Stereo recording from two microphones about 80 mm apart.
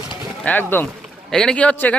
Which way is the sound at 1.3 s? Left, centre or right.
Centre.